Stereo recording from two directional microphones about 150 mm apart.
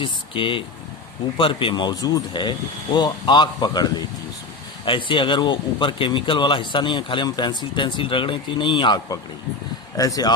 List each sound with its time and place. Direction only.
0.0 s speech: 35° left (ahead or behind)